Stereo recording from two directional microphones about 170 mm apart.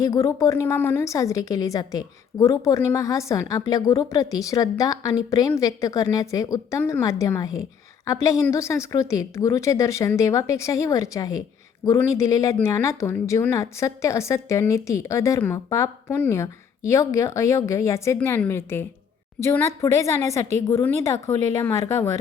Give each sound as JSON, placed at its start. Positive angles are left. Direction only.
{"t": 0.0, "sound": "a woman's voice", "side_deg": 20}